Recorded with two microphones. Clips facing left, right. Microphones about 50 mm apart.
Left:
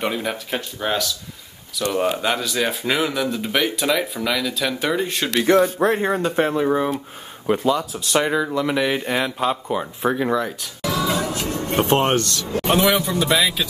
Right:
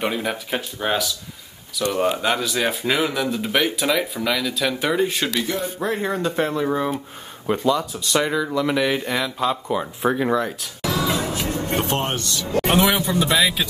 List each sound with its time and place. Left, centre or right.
0.0 s speech: centre
5.5 s speech: left
6.0 s speech: left; by 8.0 s centre
8.2 s speech: left
8.5 s speech: centre
9.2 s speech: centre
9.7 s speech: centre
12.0 s speech: left
12.7 s speech: centre